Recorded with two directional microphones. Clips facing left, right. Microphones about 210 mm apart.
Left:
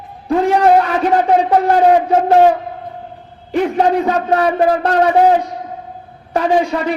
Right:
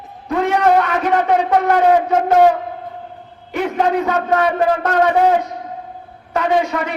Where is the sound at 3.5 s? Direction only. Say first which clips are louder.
Left 4 dB; 35° left (ahead or behind).